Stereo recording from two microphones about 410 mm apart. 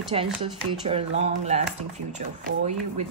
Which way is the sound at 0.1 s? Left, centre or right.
Centre.